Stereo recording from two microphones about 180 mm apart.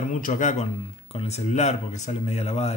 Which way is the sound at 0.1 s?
45° left (ahead or behind).